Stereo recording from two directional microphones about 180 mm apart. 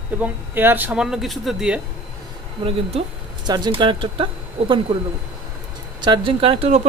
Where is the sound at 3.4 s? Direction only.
25° right (ahead or behind).